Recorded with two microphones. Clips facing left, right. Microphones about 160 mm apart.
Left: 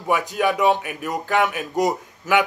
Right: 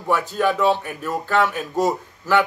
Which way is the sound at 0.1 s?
15° left (ahead or behind).